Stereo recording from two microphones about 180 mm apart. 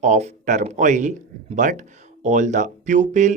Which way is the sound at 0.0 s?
40° right (ahead or behind).